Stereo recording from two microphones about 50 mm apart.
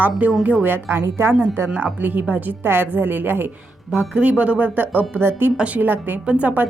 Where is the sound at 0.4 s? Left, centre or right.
Right.